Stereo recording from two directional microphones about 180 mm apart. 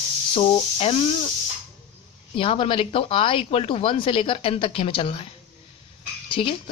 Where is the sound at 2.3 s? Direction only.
30° left (ahead or behind).